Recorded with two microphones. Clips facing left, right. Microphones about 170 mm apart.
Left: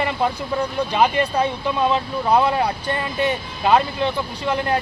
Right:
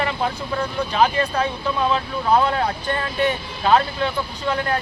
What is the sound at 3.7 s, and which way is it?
Speech, 15° left (ahead or behind).